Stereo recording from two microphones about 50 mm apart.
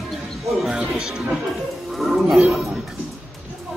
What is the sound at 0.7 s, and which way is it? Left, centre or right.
Speech, centre.